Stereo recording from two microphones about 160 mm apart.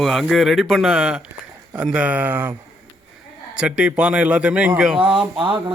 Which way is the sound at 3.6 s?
5° right (ahead or behind).